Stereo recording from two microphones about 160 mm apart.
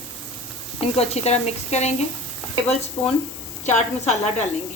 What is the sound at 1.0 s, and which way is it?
Speech, 40° left (ahead or behind).